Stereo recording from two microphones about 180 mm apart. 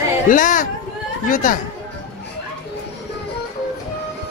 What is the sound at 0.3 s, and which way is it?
Speech, 45° left (ahead or behind).